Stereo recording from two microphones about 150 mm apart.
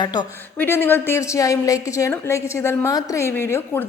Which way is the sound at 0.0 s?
25° left (ahead or behind).